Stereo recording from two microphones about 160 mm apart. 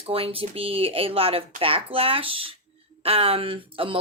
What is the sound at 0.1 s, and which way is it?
Speech, 35° right (ahead or behind).